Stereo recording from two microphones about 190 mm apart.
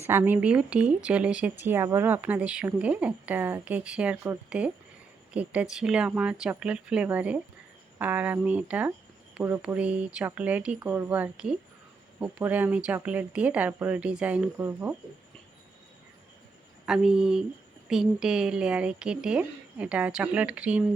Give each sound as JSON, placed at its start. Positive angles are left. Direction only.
{"t": 0.0, "sound": "a woman's voice", "side_deg": -10}
{"t": 16.8, "sound": "a woman's voice", "side_deg": -5}